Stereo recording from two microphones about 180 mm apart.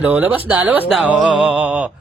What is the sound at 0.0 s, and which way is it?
Speech, 10° right (ahead or behind).